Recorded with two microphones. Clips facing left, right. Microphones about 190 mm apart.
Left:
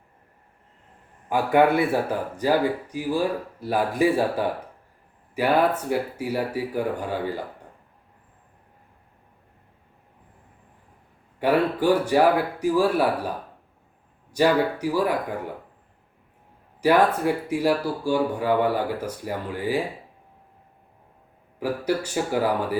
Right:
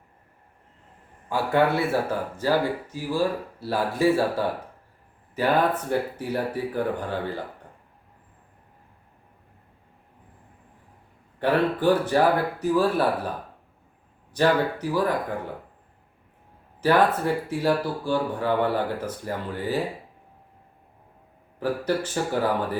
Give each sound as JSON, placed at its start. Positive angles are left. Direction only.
{"t": 1.3, "sound": "speech", "side_deg": 15}
{"t": 11.3, "sound": "speech", "side_deg": 10}
{"t": 14.3, "sound": "speech", "side_deg": 10}
{"t": 16.8, "sound": "speech", "side_deg": 10}
{"t": 21.6, "sound": "speech", "side_deg": 10}